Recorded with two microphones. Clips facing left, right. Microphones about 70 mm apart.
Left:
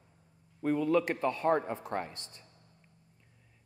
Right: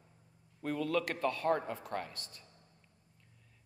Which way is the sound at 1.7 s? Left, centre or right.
Left.